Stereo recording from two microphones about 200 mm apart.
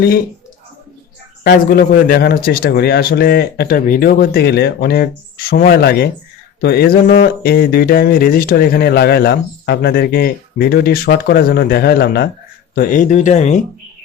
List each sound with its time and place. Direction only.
1.5 s speech: 45° left (ahead or behind)